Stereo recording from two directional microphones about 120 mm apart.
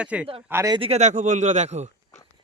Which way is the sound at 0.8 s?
65° right (ahead or behind).